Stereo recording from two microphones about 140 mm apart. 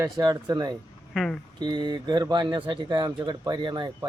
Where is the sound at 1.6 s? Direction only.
30° right (ahead or behind).